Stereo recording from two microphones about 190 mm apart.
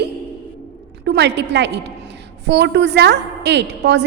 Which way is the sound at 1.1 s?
65° right (ahead or behind).